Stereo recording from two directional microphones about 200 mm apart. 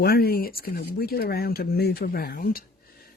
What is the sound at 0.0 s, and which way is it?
Speech, 50° left (ahead or behind).